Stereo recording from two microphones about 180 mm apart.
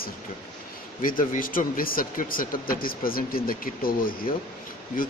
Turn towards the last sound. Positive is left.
turn(degrees=50)  # may be behind; listen again after turning